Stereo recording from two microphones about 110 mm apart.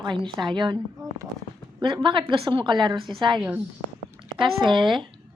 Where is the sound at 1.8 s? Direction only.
50° right (ahead or behind).